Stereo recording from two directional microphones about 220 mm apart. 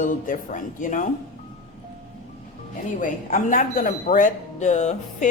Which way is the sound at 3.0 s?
35° left (ahead or behind).